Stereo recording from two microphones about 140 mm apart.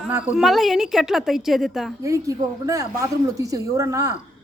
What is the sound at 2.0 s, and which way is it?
Speech, 25° right (ahead or behind).